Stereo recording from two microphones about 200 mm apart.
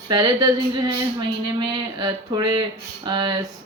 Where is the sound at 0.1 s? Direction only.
20° right (ahead or behind).